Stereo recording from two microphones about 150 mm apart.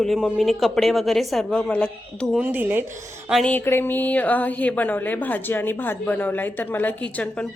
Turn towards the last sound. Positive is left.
turn(degrees=10)  # may be behind; listen again after turning